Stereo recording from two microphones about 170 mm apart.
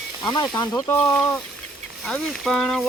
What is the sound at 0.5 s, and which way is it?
Speech, 10° left (ahead or behind).